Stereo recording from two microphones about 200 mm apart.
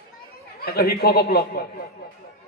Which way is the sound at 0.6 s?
50° left (ahead or behind).